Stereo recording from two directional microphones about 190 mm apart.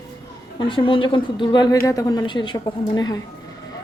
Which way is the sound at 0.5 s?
25° left (ahead or behind).